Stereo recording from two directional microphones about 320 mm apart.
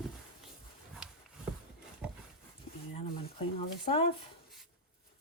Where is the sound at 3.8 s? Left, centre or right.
Centre.